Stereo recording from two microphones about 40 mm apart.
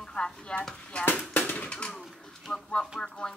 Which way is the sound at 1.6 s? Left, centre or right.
Left.